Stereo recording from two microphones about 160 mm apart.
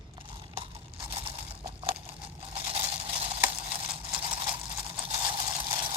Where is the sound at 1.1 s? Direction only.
35° right (ahead or behind).